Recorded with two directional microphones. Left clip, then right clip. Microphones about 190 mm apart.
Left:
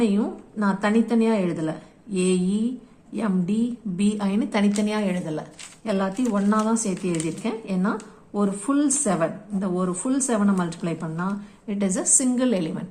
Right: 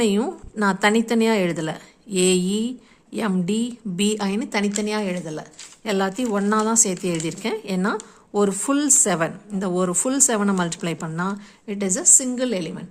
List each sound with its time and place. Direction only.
0.0 s a woman's voice: 45° right (ahead or behind); by 12.8 s 25° right (ahead or behind)